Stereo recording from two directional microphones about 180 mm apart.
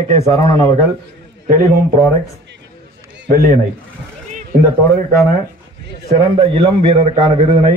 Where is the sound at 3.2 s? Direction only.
50° right (ahead or behind).